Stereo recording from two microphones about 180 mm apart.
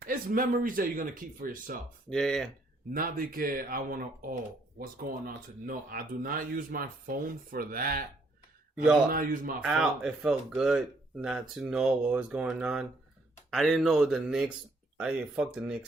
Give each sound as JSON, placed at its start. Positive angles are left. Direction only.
{"t": 0.0, "sound": "speech", "side_deg": -50}
{"t": 2.0, "sound": "speech", "side_deg": 0}
{"t": 2.9, "sound": "speech", "side_deg": -50}
{"t": 8.7, "sound": "speech", "side_deg": -5}
{"t": 9.0, "sound": "speech", "side_deg": -50}
{"t": 9.6, "sound": "speech", "side_deg": 0}